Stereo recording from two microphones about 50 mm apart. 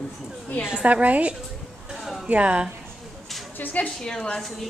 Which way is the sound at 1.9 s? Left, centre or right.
Centre.